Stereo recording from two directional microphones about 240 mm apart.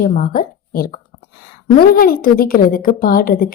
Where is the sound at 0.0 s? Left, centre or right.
Left.